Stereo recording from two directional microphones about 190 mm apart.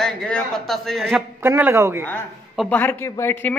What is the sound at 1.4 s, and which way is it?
Speech, 15° right (ahead or behind).